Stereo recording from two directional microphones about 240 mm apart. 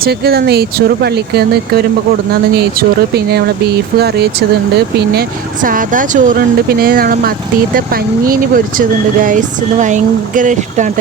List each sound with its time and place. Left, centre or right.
0.0 s speech: right
3.9 s speech: right
5.6 s speech: right
9.8 s speech: right